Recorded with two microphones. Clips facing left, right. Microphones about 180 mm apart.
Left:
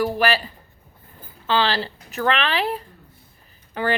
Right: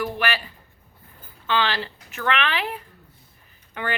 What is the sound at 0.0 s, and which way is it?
Speech, 35° left (ahead or behind).